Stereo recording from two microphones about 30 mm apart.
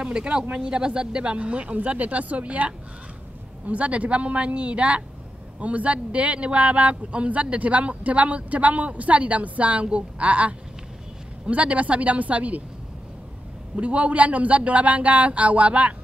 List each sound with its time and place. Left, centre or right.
0.0 s speech: right
13.7 s speech: right